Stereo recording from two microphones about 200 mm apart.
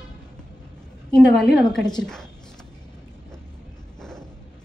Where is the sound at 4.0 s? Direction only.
5° left (ahead or behind).